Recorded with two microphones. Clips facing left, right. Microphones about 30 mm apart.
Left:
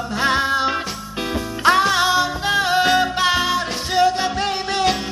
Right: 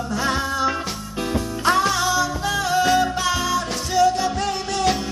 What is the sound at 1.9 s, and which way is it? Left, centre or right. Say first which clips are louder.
Music: left 3 dB; left.